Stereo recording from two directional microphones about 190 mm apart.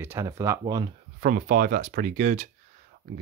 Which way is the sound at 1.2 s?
45° right (ahead or behind).